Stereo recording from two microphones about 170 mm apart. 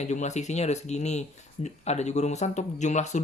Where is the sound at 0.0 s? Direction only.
45° left (ahead or behind).